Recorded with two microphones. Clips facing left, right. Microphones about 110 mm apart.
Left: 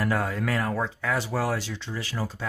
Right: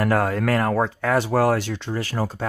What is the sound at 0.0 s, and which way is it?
Speech, 60° right (ahead or behind).